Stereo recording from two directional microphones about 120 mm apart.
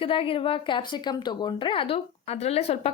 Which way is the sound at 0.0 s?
50° left (ahead or behind).